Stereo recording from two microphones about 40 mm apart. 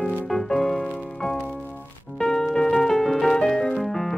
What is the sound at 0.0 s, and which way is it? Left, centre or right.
Music, centre.